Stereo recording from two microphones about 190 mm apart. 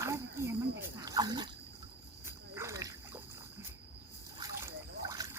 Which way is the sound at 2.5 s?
15° right (ahead or behind).